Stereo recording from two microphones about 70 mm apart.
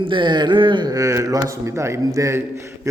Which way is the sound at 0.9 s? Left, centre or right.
Right.